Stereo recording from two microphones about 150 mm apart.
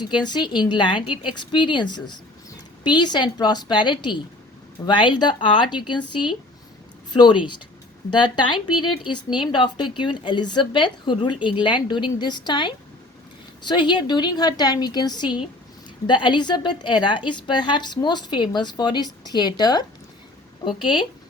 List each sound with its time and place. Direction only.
0.0 s a woman's voice: 30° left (ahead or behind)